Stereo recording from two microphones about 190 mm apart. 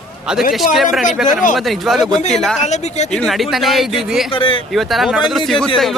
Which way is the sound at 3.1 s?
Centre (ahead or behind).